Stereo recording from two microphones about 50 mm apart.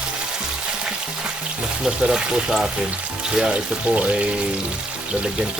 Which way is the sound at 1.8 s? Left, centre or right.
Centre.